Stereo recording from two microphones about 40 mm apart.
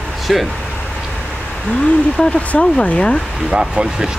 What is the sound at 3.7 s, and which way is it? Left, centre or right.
Speech, right.